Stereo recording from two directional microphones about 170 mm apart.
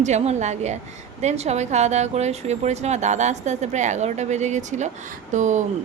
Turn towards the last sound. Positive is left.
turn(degrees=-45)  # may be behind; listen again after turning